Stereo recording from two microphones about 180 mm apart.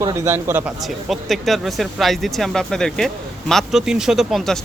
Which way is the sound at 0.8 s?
Centre (ahead or behind).